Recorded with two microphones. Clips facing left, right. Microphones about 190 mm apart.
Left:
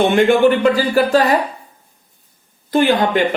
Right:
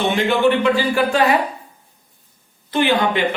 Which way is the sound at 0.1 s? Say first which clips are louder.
Left 4 dB; 50° left (ahead or behind).